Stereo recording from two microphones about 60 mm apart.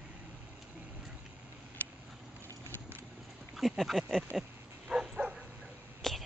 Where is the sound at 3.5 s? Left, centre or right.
Centre.